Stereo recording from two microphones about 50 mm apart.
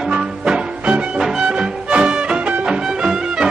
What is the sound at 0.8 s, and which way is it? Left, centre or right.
Music, right.